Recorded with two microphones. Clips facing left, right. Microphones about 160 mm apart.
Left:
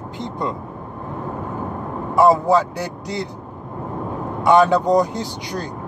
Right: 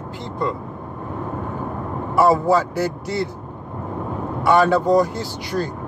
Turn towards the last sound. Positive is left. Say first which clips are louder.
# right 2 dB
turn(degrees=20)  # may be behind; listen again after turning